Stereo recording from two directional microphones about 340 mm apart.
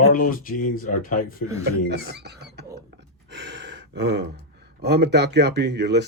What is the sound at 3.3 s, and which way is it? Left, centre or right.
Gasp, right.